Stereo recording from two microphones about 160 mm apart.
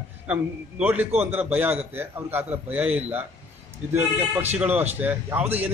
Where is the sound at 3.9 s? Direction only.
15° right (ahead or behind).